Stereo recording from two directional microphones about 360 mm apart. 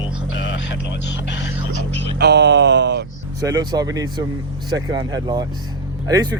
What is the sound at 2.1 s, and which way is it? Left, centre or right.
Speech, right.